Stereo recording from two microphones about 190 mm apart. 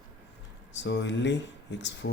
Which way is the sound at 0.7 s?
65° left (ahead or behind).